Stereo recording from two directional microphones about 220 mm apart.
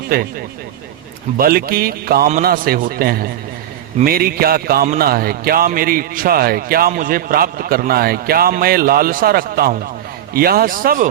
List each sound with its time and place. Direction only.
0.1 s a man's voice: 40° right (ahead or behind)
1.4 s a man's voice: 45° right (ahead or behind)